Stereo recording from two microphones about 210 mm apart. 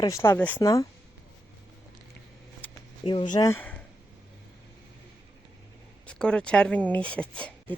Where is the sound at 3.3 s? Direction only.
15° left (ahead or behind).